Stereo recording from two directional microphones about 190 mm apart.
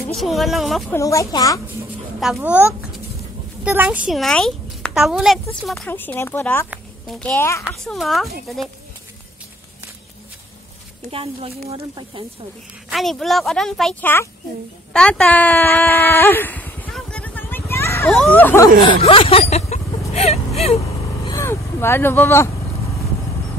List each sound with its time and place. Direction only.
0.2 s a child's voice: centre (ahead or behind)
0.9 s speech: 15° left (ahead or behind)
2.1 s a child's voice: 5° right (ahead or behind)
6.7 s a sound: centre (ahead or behind)
7.3 s speech: 15° left (ahead or behind)
7.6 s a child's voice: centre (ahead or behind)
11.1 s speech: 30° right (ahead or behind)
12.9 s a child's voice: centre (ahead or behind)
14.9 s a sound: 5° left (ahead or behind)
18.9 s speech: 30° left (ahead or behind)
21.3 s speech: 15° left (ahead or behind)